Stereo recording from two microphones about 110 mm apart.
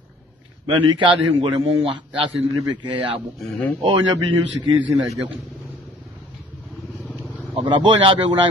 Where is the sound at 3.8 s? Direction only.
50° right (ahead or behind).